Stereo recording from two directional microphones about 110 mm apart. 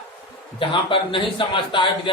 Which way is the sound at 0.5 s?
50° left (ahead or behind).